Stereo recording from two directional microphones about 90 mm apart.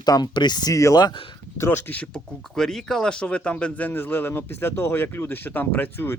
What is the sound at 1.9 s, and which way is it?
Speech, 15° left (ahead or behind).